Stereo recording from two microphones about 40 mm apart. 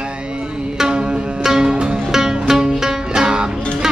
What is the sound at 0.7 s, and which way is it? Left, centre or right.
Music, right.